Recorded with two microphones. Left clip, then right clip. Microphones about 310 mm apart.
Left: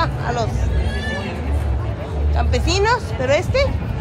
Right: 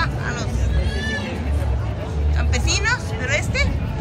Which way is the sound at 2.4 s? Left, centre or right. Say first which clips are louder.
Left 5 dB; centre.